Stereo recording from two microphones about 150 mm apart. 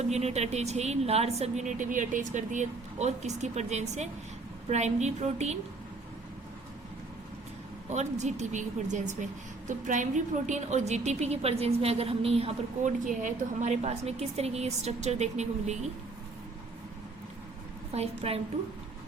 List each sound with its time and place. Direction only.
0.1 s speech: 45° right (ahead or behind)
7.9 s speech: 50° right (ahead or behind)
12.8 s speech: 60° right (ahead or behind)
17.9 s speech: 45° right (ahead or behind)